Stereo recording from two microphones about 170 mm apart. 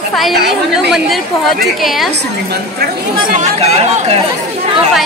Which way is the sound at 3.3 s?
40° right (ahead or behind).